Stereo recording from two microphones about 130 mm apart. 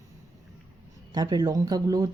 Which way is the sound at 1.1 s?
30° right (ahead or behind).